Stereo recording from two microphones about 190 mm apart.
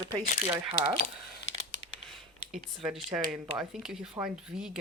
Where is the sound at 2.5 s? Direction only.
5° right (ahead or behind).